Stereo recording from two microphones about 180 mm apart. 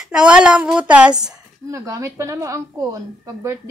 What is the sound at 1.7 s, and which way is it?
A woman's voice, 15° right (ahead or behind).